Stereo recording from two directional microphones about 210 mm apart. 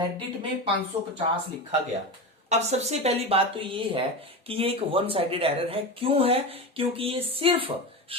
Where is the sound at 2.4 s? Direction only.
30° right (ahead or behind).